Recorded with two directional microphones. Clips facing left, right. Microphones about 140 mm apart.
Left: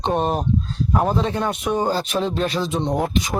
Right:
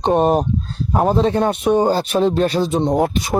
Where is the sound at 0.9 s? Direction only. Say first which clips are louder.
Right 5 dB; 35° right (ahead or behind).